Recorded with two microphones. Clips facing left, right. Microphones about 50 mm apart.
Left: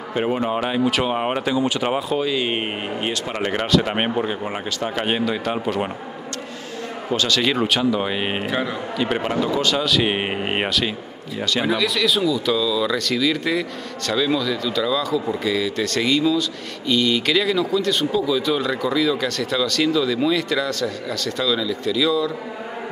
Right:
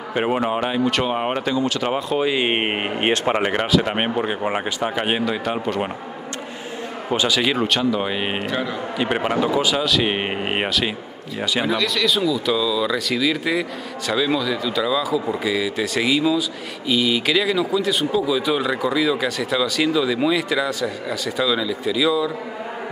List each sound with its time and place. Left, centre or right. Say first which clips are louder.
0.1 s speech: right 1 dB; centre
0.6 s speech: even; centre
2.1 s speech: right 2 dB; right
3.3 s speech: right 3 dB; centre
3.6 s speech: even; centre
4.2 s speech: right 2 dB; centre
7.1 s speech: right 1 dB; centre
8.9 s speech: right 1 dB; centre
11.6 s speech: left 1 dB; centre